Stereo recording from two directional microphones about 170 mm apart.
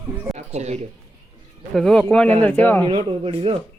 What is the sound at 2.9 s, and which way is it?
Speech, 30° right (ahead or behind).